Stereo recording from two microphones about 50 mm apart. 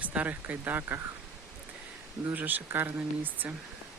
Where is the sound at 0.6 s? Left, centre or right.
Right.